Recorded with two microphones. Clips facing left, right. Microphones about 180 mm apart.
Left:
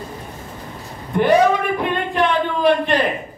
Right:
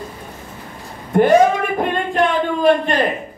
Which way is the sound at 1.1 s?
45° right (ahead or behind).